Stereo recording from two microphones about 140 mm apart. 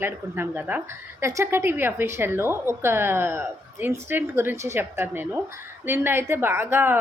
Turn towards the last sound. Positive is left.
turn(degrees=-15)  # may be behind; listen again after turning